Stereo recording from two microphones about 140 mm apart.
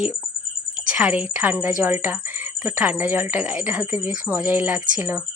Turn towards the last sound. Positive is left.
turn(degrees=-10)  # may be behind; listen again after turning